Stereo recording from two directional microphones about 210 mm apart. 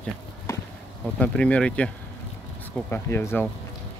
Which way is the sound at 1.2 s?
5° left (ahead or behind).